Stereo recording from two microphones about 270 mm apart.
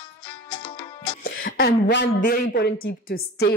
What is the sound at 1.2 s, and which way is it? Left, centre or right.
A woman's voice, left.